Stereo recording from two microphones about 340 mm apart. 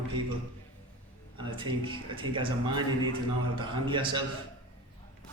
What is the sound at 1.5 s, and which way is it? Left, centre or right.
A man's voice, centre.